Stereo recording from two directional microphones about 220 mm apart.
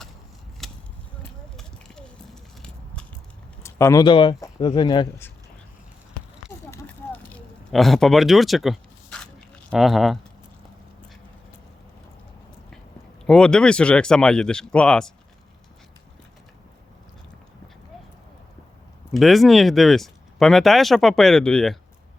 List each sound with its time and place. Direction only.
0.6 s a sound: centre (ahead or behind)
1.5 s horse: 5° left (ahead or behind)
3.6 s speech: 10° left (ahead or behind)
6.7 s a sound: 5° left (ahead or behind)
13.2 s speech: 5° left (ahead or behind)
19.1 s speech: centre (ahead or behind)